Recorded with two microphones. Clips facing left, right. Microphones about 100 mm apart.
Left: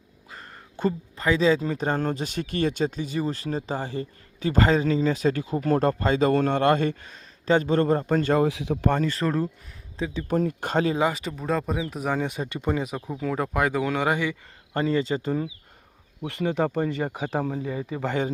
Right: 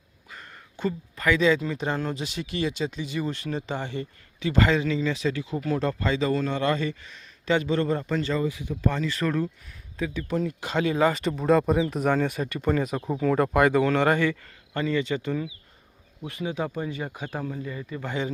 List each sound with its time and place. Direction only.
0.3 s a sound: 35° left (ahead or behind)
1.1 s speech: 30° left (ahead or behind); by 8.4 s 50° left (ahead or behind)
8.4 s speech: 90° left; by 9.0 s 70° left (ahead or behind)
9.1 s speech: 30° left (ahead or behind)
10.2 s speech: 45° left (ahead or behind)
10.9 s speech: 15° left (ahead or behind)
11.2 s speech: centre (ahead or behind)
13.1 s speech: centre (ahead or behind)
14.7 s speech: 35° left (ahead or behind)
16.2 s speech: 65° left (ahead or behind); by 18.1 s 90° left